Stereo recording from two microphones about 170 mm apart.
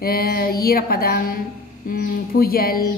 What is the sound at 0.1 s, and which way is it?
Speech, 60° left (ahead or behind).